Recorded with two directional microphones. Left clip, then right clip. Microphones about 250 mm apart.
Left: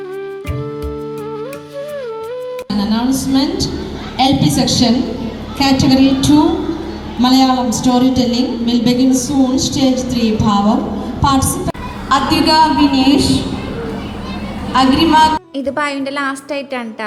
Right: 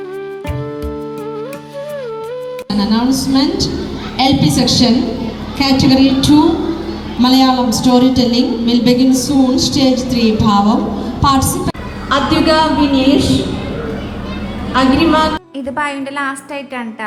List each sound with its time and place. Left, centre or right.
2.6 s a woman's voice: left
12.0 s a woman's voice: left
14.7 s a woman's voice: left
15.6 s a woman's voice: centre